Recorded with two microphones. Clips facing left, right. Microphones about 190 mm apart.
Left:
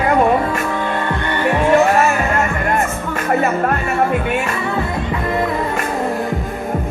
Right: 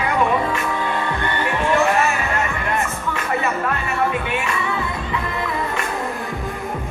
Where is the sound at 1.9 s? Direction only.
45° left (ahead or behind).